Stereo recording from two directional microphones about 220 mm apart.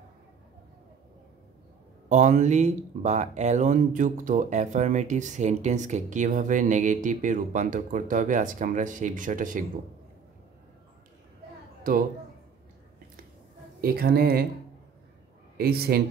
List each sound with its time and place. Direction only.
2.0 s speech: 35° right (ahead or behind)
11.9 s speech: 40° right (ahead or behind)
13.7 s a woman's voice: 45° right (ahead or behind)
15.5 s a woman's voice: 45° right (ahead or behind)